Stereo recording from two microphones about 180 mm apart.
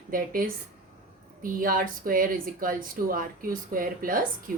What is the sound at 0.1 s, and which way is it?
Speech, 50° right (ahead or behind).